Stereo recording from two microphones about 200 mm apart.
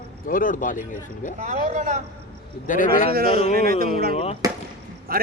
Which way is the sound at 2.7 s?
40° left (ahead or behind).